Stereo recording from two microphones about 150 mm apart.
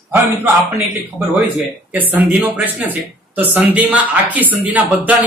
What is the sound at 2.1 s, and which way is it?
Speech, 10° right (ahead or behind).